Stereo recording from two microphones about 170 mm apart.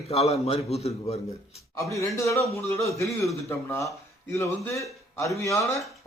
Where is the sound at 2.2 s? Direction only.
15° left (ahead or behind).